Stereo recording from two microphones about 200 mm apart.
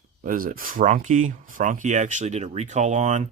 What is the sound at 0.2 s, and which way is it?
Speech, 45° right (ahead or behind).